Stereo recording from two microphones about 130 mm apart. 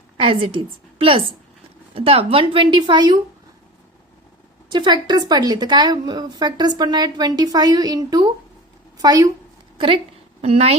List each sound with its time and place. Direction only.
0.2 s a woman's voice: 45° right (ahead or behind)
4.7 s a woman's voice: 35° right (ahead or behind)
9.7 s a woman's voice: 40° right (ahead or behind)